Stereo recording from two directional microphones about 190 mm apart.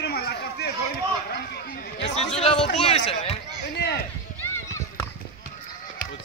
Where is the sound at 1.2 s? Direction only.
55° left (ahead or behind).